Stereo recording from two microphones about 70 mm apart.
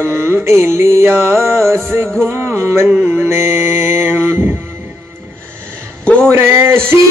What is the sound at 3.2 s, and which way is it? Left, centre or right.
Mantra, right.